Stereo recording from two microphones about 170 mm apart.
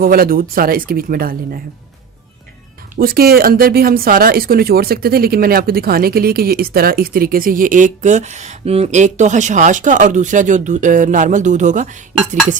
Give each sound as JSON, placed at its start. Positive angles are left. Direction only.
{"t": 0.0, "sound": "speech", "side_deg": -60}
{"t": 3.0, "sound": "speech", "side_deg": -60}